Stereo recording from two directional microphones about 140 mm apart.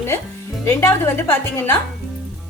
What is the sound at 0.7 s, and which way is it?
A woman's voice, 20° left (ahead or behind).